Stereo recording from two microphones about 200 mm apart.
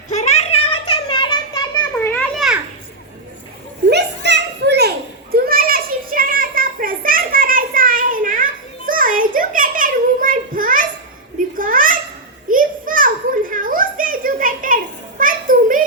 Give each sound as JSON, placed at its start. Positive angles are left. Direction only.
{"t": 0.1, "sound": "children playing", "side_deg": 35}
{"t": 2.4, "sound": "children playing", "side_deg": 0}
{"t": 3.8, "sound": "children playing", "side_deg": -60}
{"t": 8.9, "sound": "a sound", "side_deg": -45}